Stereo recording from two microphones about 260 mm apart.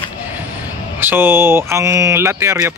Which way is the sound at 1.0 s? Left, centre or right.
Centre.